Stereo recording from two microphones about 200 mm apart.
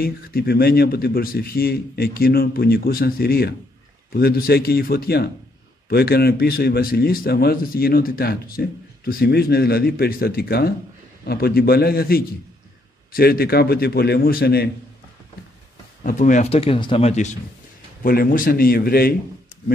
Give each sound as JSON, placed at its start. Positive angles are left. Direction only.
{"t": 0.0, "sound": "a man's voice", "side_deg": 50}
{"t": 16.0, "sound": "speech", "side_deg": 40}
{"t": 18.0, "sound": "a man's voice", "side_deg": 45}